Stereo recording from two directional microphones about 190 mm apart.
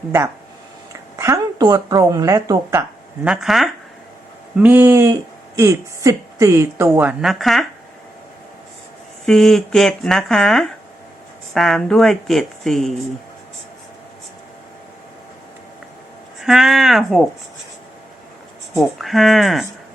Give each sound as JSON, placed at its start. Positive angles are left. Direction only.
{"t": 1.2, "sound": "speech", "side_deg": -15}
{"t": 3.2, "sound": "speech", "side_deg": 0}
{"t": 9.2, "sound": "speech", "side_deg": 0}
{"t": 16.4, "sound": "speech", "side_deg": 0}
{"t": 18.7, "sound": "speech", "side_deg": 0}